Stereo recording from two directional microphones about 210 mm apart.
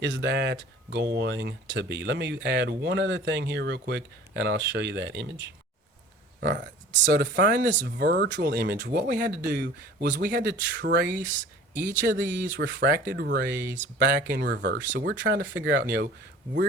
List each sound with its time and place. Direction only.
0.0 s speech: 55° right (ahead or behind)
6.4 s speech: 55° right (ahead or behind)
12.5 s speech: 55° right (ahead or behind)